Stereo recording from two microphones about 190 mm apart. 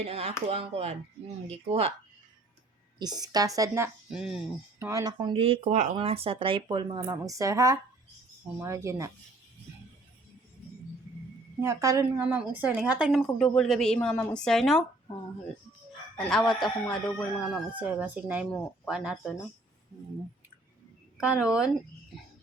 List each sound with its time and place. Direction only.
0.0 s speech: 35° right (ahead or behind)
3.0 s speech: 20° right (ahead or behind)
4.1 s a woman's voice: centre (ahead or behind)
4.9 s speech: 20° right (ahead or behind)
11.6 s a woman's voice: 15° right (ahead or behind); by 14.8 s centre (ahead or behind)
16.3 s a woman's voice: centre (ahead or behind)
21.2 s a woman's voice: 5° right (ahead or behind)